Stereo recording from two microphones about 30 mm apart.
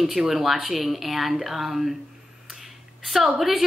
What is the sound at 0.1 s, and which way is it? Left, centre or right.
Speech, centre.